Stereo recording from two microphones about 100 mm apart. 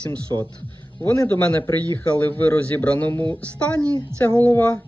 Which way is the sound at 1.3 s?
15° left (ahead or behind).